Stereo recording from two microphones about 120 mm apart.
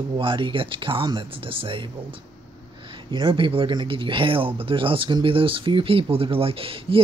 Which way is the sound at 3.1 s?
45° right (ahead or behind).